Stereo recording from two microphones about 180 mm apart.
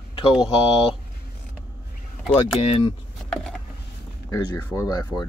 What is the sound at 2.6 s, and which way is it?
Speech, 30° left (ahead or behind).